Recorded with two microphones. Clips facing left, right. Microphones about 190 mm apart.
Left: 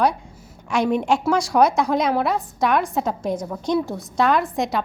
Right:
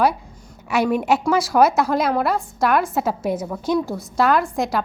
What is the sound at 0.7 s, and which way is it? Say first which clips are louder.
A woman's voice: right 1 dB; 5° right (ahead or behind).